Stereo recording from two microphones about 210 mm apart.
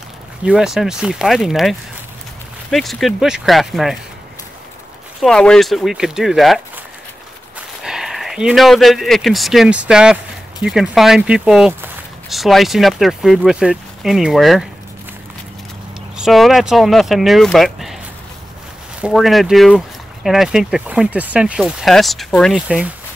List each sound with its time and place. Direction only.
0.5 s speech: centre (ahead or behind)
5.2 s speech: 5° left (ahead or behind)
7.8 s speech: centre (ahead or behind)
16.2 s speech: centre (ahead or behind)
18.9 s speech: 5° right (ahead or behind)